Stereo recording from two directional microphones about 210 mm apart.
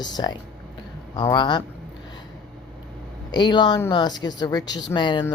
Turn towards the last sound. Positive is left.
turn(degrees=20)  # may be behind; listen again after turning